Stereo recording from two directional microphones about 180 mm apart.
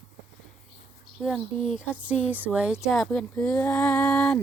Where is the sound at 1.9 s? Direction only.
5° right (ahead or behind).